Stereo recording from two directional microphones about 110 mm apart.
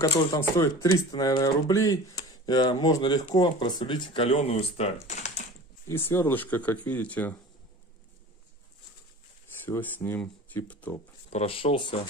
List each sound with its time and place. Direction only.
0.4 s speech: 30° left (ahead or behind); by 5.3 s 85° left
5.9 s speech: 25° left (ahead or behind)
9.7 s speech: 20° left (ahead or behind)
11.2 s speech: 65° left (ahead or behind)